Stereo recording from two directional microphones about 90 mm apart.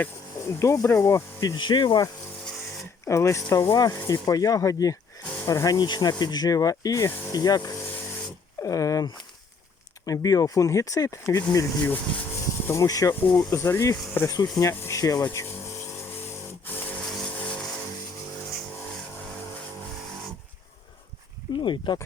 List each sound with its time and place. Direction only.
0.6 s speech: 30° left (ahead or behind)
1.5 s speech: 60° left (ahead or behind)
3.1 s speech: 35° left (ahead or behind)
8.6 s speech: 40° left (ahead or behind)
10.1 s speech: 40° left (ahead or behind)
11.8 s speech: 20° left (ahead or behind)
12.6 s speech: 35° left (ahead or behind)
17.2 s vehicle: 15° left (ahead or behind)
21.6 s speech: 60° left (ahead or behind)